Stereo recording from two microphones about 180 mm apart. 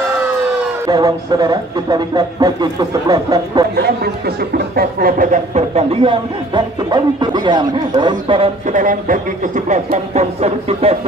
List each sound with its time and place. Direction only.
0.8 s speech: 20° right (ahead or behind)
3.7 s speech: 60° right (ahead or behind); by 8.5 s 25° right (ahead or behind)
8.6 s speech: 45° right (ahead or behind)